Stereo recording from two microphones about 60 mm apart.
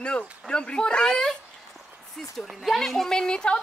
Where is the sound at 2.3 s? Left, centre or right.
Centre.